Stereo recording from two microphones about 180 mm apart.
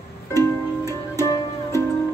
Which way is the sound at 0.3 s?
15° left (ahead or behind).